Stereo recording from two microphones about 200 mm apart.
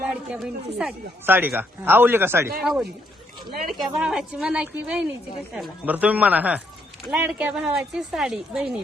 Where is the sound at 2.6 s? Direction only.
Centre (ahead or behind).